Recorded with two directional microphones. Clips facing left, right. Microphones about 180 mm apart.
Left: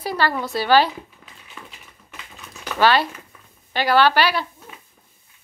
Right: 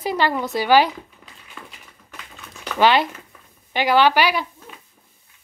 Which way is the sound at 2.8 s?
20° right (ahead or behind).